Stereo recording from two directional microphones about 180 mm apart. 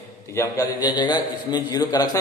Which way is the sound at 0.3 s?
15° left (ahead or behind).